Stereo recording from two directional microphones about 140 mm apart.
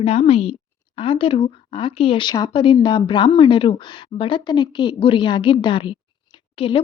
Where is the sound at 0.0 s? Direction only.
45° left (ahead or behind).